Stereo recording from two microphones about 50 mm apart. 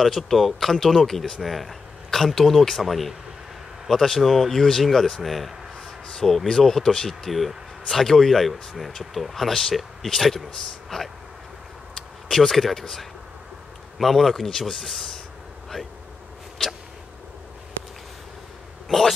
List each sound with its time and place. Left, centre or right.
0.0 s speech: centre
18.9 s speech: centre